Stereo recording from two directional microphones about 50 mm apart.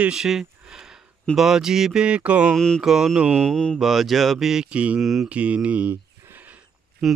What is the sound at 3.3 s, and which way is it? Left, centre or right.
Mantra, centre.